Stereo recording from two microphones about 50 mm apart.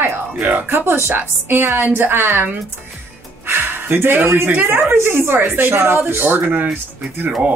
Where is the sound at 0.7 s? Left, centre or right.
Right.